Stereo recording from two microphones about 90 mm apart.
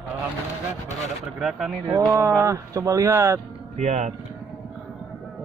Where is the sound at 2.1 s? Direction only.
35° right (ahead or behind).